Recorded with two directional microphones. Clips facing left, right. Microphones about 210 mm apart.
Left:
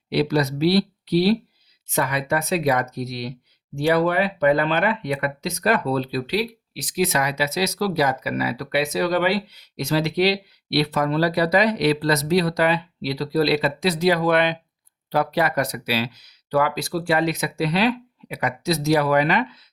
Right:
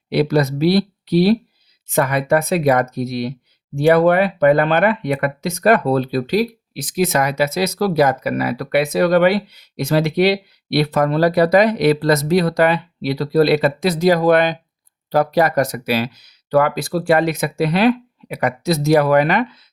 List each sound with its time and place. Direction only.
0.1 s speech: 50° right (ahead or behind)